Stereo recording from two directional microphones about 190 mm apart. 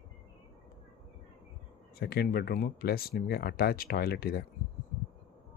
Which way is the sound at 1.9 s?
55° left (ahead or behind).